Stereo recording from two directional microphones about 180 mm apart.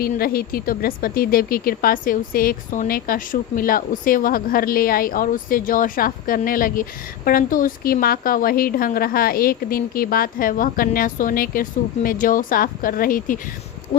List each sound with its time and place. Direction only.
0.0 s speech: 55° left (ahead or behind)